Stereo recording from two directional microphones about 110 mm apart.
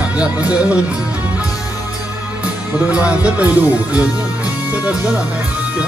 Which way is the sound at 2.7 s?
10° right (ahead or behind).